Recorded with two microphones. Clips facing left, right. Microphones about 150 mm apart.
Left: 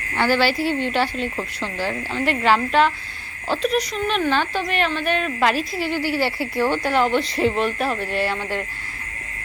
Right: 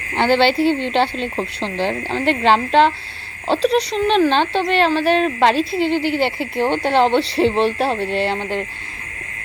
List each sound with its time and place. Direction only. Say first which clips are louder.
0.2 s speech: right 4 dB; 25° right (ahead or behind)